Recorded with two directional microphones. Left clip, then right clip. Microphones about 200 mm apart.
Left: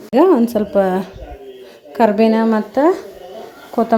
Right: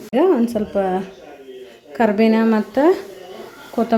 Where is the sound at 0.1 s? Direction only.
15° left (ahead or behind).